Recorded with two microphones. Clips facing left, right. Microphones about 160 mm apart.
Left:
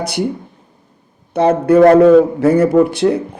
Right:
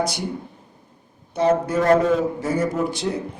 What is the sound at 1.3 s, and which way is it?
Speech, 65° left (ahead or behind).